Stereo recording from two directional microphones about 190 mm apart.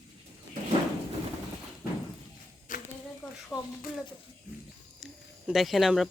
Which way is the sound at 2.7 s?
45° left (ahead or behind).